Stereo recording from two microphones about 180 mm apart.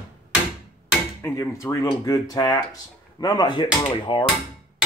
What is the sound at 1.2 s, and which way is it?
Speech, 15° left (ahead or behind).